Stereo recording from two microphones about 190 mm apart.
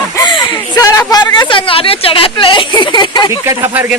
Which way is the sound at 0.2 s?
25° left (ahead or behind).